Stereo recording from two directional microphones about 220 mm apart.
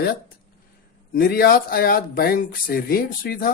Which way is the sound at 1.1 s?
45° left (ahead or behind).